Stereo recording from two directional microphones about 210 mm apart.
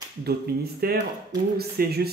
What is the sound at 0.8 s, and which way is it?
Speech, 45° right (ahead or behind).